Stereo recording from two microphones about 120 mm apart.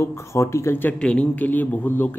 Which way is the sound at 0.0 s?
25° left (ahead or behind).